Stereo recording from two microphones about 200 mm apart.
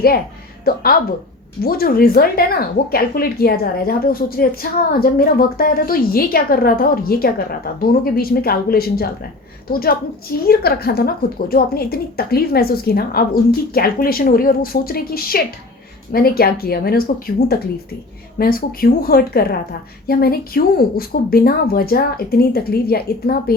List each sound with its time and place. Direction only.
0.6 s a woman's voice: 45° left (ahead or behind)